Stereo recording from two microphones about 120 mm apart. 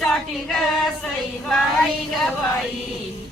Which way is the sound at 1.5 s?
5° left (ahead or behind).